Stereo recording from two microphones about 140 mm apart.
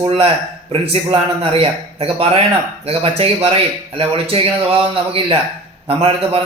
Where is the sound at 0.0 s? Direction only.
40° right (ahead or behind).